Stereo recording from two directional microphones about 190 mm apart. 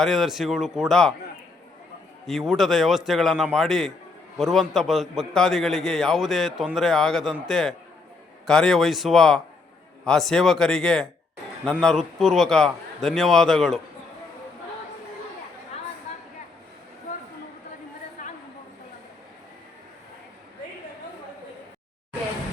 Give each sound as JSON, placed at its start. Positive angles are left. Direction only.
{"t": 0.0, "sound": "a man's voice", "side_deg": 0}
{"t": 2.2, "sound": "a man's voice", "side_deg": 0}
{"t": 18.2, "sound": "a sound", "side_deg": 40}